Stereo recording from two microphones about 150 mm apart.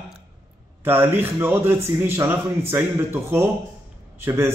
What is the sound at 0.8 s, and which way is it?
A man's voice, 15° right (ahead or behind).